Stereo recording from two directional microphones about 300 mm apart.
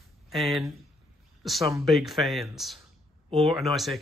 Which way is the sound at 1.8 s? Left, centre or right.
Centre.